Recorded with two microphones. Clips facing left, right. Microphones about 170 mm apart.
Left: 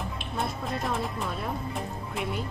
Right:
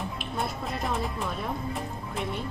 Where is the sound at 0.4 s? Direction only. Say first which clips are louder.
Left 1 dB; centre (ahead or behind).